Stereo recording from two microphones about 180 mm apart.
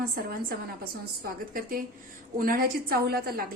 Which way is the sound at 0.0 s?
55° right (ahead or behind).